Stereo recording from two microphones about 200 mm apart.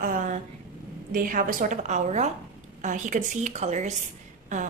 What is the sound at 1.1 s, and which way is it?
Speech, 45° right (ahead or behind).